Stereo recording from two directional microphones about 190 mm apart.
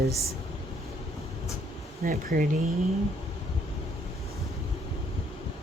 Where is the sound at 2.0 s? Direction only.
50° right (ahead or behind).